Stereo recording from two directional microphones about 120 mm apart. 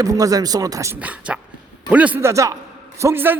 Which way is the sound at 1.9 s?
10° right (ahead or behind).